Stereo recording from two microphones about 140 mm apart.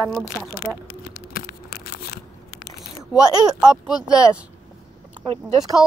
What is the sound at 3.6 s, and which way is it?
Speech, 5° right (ahead or behind).